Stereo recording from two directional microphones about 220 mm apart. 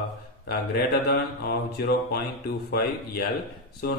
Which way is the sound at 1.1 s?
45° left (ahead or behind).